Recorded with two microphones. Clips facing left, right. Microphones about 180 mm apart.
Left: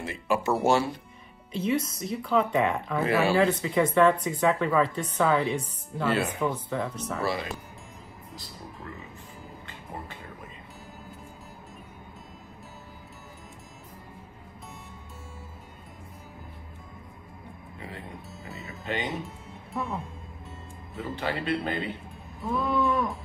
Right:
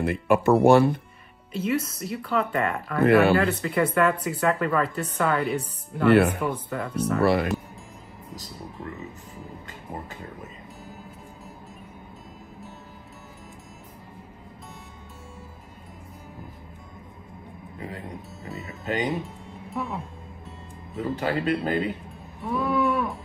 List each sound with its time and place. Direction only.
0.0 s speech: 60° right (ahead or behind)
1.5 s speech: 5° right (ahead or behind)
3.0 s speech: 60° right (ahead or behind)
3.4 s speech: 5° right (ahead or behind)
5.0 s speech: 10° left (ahead or behind)
5.4 s speech: 5° right (ahead or behind)
7.2 s speech: 60° right (ahead or behind)
17.7 s speech: 40° right (ahead or behind)
18.7 s music: 40° right (ahead or behind)
19.0 s music: centre (ahead or behind)
21.0 s speech: 40° right (ahead or behind)
22.5 s speech: 10° right (ahead or behind)